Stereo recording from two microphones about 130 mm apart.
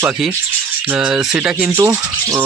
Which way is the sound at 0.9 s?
10° right (ahead or behind).